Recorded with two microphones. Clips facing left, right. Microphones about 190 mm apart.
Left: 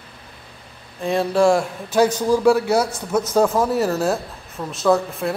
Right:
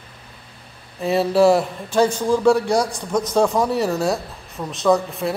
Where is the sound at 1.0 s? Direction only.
5° right (ahead or behind).